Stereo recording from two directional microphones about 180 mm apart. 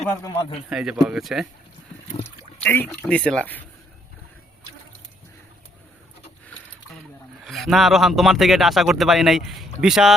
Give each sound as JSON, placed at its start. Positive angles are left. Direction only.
{"t": 0.2, "sound": "a man's voice", "side_deg": 20}
{"t": 0.7, "sound": "speech", "side_deg": -5}
{"t": 2.6, "sound": "speech", "side_deg": 10}
{"t": 7.4, "sound": "speech", "side_deg": 0}